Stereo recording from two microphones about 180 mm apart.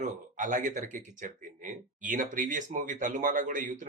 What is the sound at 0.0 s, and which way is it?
Speech, 45° right (ahead or behind).